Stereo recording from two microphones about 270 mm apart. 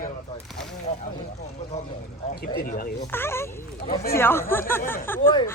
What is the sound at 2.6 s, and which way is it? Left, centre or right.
Speech, left.